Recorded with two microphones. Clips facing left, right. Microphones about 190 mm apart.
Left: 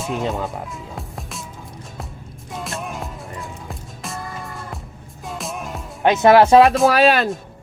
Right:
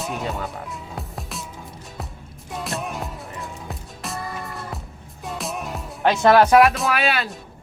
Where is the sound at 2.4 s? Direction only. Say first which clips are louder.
Right 1 dB; centre (ahead or behind).